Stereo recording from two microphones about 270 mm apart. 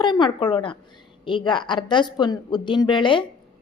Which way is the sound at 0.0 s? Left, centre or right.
Centre.